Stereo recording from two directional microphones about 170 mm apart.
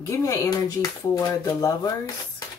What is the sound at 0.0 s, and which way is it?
Speech, 20° left (ahead or behind).